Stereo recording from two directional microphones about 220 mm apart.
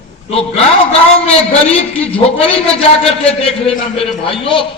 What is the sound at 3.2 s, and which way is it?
A man's voice, 25° left (ahead or behind).